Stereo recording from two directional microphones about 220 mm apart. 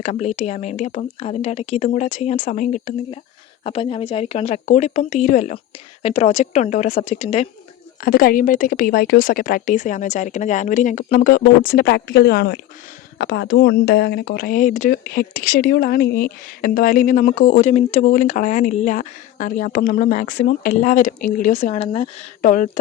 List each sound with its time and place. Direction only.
0.0 s speech: 30° left (ahead or behind)
8.0 s speech: 40° left (ahead or behind); by 22.4 s 25° left (ahead or behind)
22.4 s speech: 35° left (ahead or behind)